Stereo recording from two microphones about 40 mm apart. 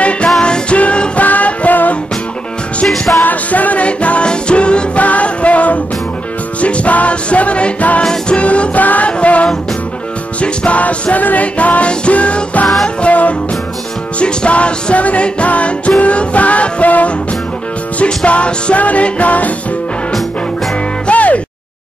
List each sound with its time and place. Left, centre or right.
0.4 s music: left
3.2 s music: left
14.2 s music: left
21.1 s music: left